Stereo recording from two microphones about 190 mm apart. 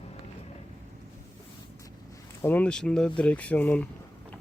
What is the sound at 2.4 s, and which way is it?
Speech, 10° left (ahead or behind).